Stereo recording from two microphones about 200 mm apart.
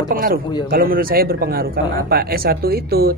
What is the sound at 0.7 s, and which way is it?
A man's voice, 45° right (ahead or behind).